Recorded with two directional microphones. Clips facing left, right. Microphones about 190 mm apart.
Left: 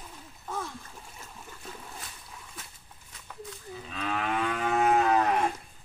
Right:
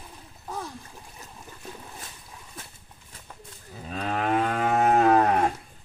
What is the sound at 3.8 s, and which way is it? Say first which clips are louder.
Moo: right 5 dB; 40° right (ahead or behind).